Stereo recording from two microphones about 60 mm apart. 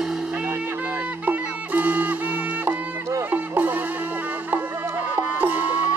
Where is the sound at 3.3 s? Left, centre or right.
Right.